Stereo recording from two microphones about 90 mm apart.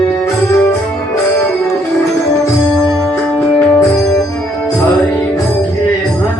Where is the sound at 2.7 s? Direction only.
5° left (ahead or behind).